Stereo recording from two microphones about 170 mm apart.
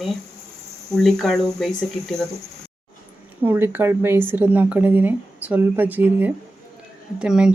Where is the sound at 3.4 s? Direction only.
10° right (ahead or behind).